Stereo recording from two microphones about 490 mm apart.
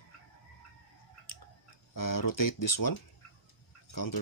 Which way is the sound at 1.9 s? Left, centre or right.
Left.